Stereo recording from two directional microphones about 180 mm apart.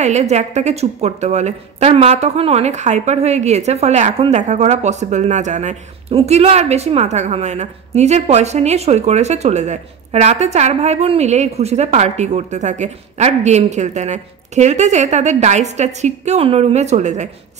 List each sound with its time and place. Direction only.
0.0 s a woman's voice: 40° right (ahead or behind)